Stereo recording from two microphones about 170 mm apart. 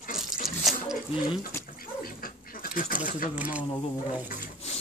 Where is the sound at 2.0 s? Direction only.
60° left (ahead or behind).